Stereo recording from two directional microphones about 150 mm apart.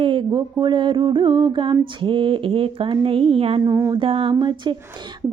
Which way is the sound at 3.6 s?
20° right (ahead or behind).